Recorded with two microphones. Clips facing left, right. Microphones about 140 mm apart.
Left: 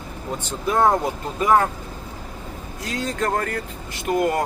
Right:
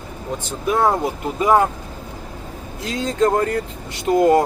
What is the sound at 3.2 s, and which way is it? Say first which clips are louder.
Speech: right 8 dB; 20° right (ahead or behind).